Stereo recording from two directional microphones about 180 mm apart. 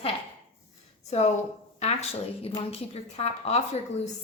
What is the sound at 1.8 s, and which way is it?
A woman's voice, 35° left (ahead or behind).